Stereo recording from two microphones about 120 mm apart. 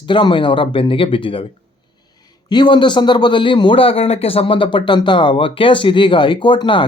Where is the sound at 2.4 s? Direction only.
40° left (ahead or behind).